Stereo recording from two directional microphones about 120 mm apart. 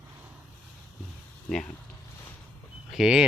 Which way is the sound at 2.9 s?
5° right (ahead or behind).